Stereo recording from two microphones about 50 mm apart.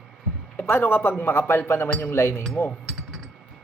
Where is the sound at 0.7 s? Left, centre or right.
Left.